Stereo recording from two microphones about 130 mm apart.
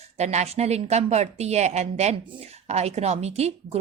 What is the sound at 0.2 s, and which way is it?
A woman's voice, 60° right (ahead or behind).